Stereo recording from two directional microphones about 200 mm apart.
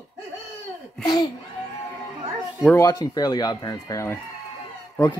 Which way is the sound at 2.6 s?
15° left (ahead or behind).